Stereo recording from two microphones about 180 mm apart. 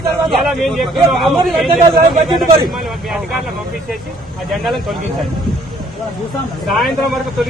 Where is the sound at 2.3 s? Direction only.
25° right (ahead or behind).